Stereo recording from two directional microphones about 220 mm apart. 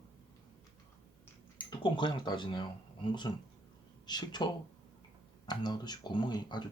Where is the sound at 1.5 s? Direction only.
20° left (ahead or behind).